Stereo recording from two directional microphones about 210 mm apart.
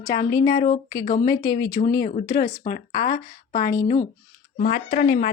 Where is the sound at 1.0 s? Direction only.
40° left (ahead or behind).